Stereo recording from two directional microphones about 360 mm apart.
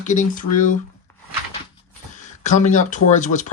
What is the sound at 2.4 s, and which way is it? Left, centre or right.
Speech, centre.